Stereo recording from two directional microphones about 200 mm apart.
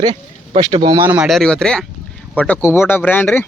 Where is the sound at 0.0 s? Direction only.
20° right (ahead or behind).